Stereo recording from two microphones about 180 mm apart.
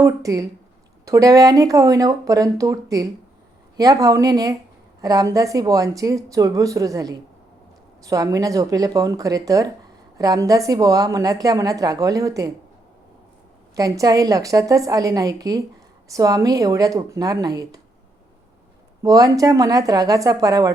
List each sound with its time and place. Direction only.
0.0 s a woman's voice: 20° right (ahead or behind)
13.7 s a woman's voice: 20° right (ahead or behind)
19.0 s a woman's voice: 20° right (ahead or behind)